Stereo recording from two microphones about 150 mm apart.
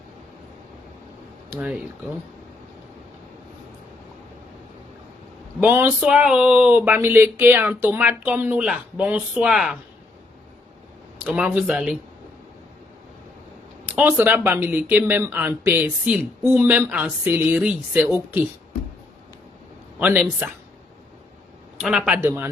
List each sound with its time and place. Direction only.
1.5 s speech: 5° right (ahead or behind)
5.5 s speech: 15° right (ahead or behind)
11.2 s speech: 10° right (ahead or behind)
13.8 s speech: 10° right (ahead or behind)
20.0 s speech: 10° right (ahead or behind)
21.8 s a man's voice: 5° right (ahead or behind)
22.2 s speech: 15° right (ahead or behind)